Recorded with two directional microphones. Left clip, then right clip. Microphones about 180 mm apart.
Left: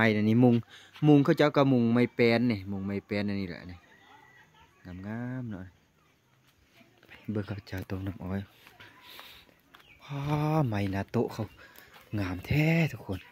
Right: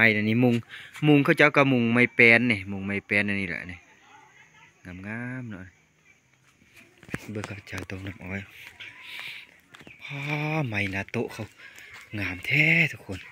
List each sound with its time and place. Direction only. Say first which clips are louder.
0.0 s speech: right 4 dB; 15° left (ahead or behind)
4.8 s speech: right 4 dB; 5° left (ahead or behind)
7.3 s speech: left 2 dB; 30° left (ahead or behind)
8.7 s a sound: right 9 dB; 30° left (ahead or behind)
9.9 s speech: right 3 dB; 25° left (ahead or behind)